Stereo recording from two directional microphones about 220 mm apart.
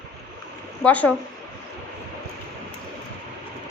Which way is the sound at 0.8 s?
5° left (ahead or behind).